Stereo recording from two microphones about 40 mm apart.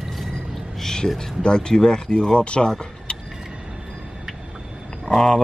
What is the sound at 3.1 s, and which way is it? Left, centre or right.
Vehicle, left.